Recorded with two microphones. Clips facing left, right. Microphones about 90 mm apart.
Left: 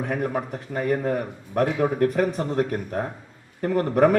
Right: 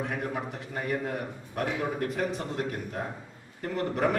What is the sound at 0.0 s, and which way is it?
A man's voice, 45° left (ahead or behind).